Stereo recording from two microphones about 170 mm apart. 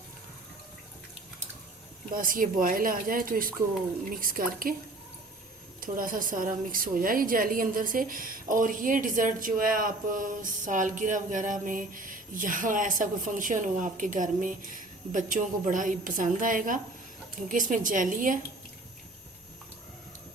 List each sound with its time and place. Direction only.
2.1 s speech: 55° right (ahead or behind)
5.8 s a woman's voice: 55° right (ahead or behind)